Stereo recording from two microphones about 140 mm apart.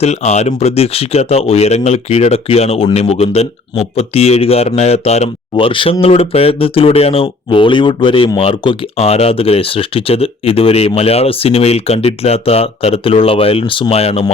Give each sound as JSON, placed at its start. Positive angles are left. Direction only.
{"t": 0.0, "sound": "speech", "side_deg": 55}